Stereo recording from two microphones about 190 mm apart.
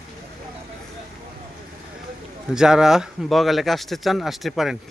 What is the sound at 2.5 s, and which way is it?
Speech, 5° right (ahead or behind).